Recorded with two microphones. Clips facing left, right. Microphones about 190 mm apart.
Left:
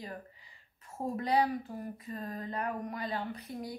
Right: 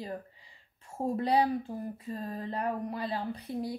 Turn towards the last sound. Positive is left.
turn(degrees=-30)  # may be behind; listen again after turning